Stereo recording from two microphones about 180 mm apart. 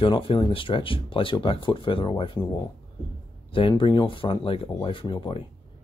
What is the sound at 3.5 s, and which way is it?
Speech, 30° left (ahead or behind).